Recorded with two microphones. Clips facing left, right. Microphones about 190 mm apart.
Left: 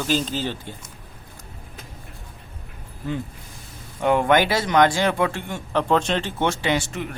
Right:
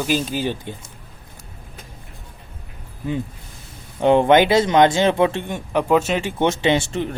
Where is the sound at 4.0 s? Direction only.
25° right (ahead or behind).